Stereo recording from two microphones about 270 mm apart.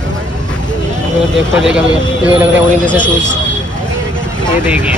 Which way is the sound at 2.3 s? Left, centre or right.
Centre.